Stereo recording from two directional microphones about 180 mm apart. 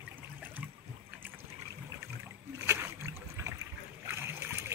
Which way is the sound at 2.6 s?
15° right (ahead or behind).